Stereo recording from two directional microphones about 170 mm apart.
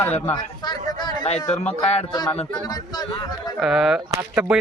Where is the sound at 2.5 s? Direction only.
20° left (ahead or behind).